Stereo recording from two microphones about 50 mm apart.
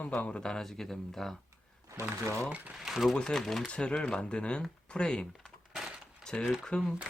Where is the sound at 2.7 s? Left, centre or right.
Centre.